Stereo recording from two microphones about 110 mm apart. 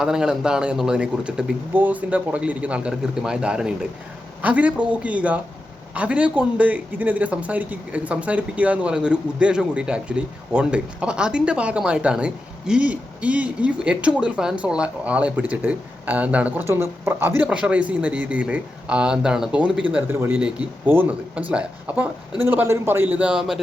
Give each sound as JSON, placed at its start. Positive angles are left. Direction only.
{"t": 0.0, "sound": "speech", "side_deg": -5}